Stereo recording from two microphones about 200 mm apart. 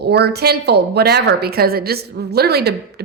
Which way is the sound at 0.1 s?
55° right (ahead or behind).